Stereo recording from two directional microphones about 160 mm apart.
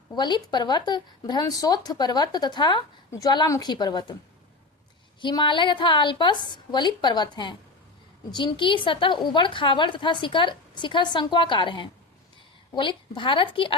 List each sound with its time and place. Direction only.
0.2 s speech: 25° left (ahead or behind)
5.2 s a woman's voice: 30° left (ahead or behind)